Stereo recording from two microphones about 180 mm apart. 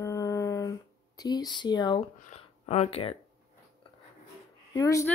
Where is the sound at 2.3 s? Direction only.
35° left (ahead or behind).